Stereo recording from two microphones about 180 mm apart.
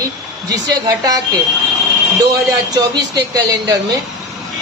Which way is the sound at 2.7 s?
20° right (ahead or behind).